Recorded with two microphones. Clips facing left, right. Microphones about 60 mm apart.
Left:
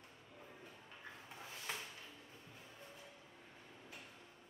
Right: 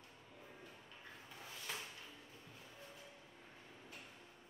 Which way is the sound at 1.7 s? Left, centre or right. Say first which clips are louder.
Left 1 dB; left.